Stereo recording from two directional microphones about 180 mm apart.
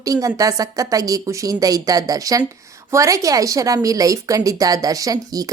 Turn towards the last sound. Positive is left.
turn(degrees=-20)  # may be behind; listen again after turning